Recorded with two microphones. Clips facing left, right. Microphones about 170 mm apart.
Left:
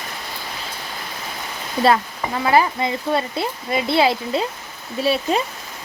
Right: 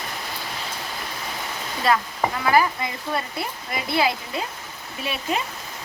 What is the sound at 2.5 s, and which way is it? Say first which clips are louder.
Speech: left 4 dB; 25° left (ahead or behind).